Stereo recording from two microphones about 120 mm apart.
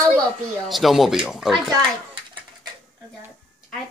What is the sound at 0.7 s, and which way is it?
Speech, centre (ahead or behind).